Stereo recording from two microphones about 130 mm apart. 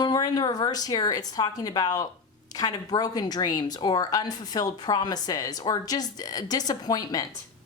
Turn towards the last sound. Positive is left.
turn(degrees=30)  # may be behind; listen again after turning